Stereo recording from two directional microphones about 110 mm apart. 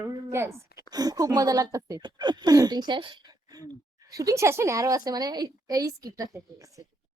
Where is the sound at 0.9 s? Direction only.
35° right (ahead or behind).